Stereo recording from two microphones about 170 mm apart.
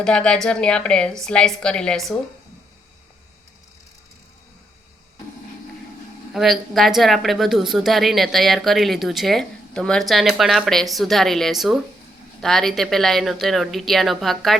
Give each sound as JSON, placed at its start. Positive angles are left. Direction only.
{"t": 0.0, "sound": "a woman's voice", "side_deg": 5}
{"t": 6.3, "sound": "a woman's voice", "side_deg": 0}